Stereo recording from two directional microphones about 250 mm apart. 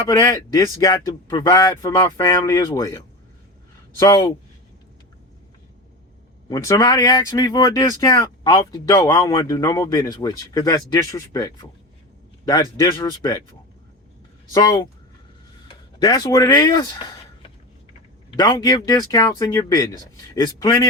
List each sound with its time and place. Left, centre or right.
0.0 s speech: centre
6.5 s speech: centre
12.7 s speech: centre
14.5 s speech: centre
16.0 s speech: centre
18.3 s speech: centre